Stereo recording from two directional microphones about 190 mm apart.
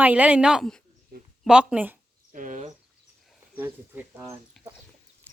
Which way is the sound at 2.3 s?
40° right (ahead or behind).